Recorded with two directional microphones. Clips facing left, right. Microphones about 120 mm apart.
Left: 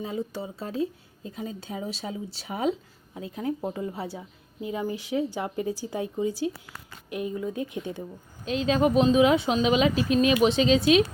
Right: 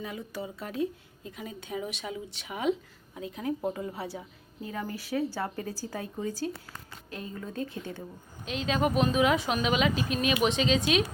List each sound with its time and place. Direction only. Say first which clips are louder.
0.0 s speech: left 5 dB; 30° left (ahead or behind)
4.6 s speech: left 6 dB; 15° left (ahead or behind)
8.4 s speech: left 5 dB; 35° left (ahead or behind)